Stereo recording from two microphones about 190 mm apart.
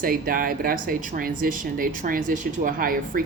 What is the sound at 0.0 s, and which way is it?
Speech, 50° right (ahead or behind).